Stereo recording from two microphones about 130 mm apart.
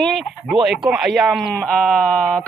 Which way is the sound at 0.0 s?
Centre (ahead or behind).